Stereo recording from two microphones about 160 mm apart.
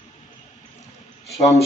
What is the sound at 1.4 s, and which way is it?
Speech, 40° left (ahead or behind).